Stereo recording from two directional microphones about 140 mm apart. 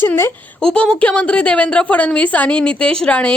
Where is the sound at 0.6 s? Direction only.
5° left (ahead or behind).